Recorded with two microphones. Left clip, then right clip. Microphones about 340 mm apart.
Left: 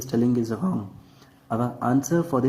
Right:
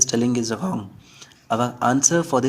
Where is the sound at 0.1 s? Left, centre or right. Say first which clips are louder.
Right 2 dB; right.